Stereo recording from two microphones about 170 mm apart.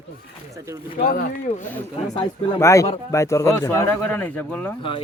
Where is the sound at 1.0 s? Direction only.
55° left (ahead or behind).